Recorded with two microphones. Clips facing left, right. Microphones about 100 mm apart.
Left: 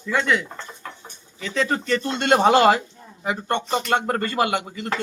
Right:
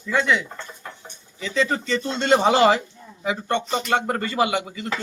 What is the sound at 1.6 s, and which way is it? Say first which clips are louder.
Speech: even; 55° left (ahead or behind).